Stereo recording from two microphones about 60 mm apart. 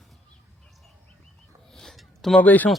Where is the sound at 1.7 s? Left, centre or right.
Centre.